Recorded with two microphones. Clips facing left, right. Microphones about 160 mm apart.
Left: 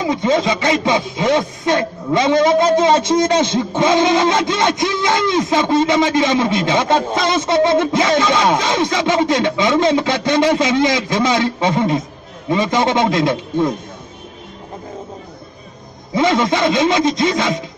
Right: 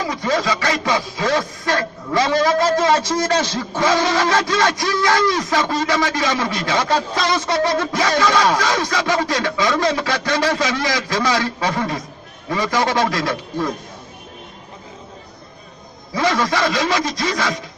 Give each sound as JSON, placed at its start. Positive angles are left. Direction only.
{"t": 0.0, "sound": "speech", "side_deg": 20}
{"t": 16.1, "sound": "speech", "side_deg": 20}